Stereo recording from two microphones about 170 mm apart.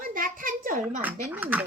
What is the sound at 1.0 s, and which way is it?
Speech, 10° right (ahead or behind).